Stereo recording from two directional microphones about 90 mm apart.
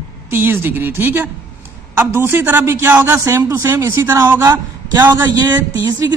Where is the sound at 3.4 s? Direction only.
30° right (ahead or behind).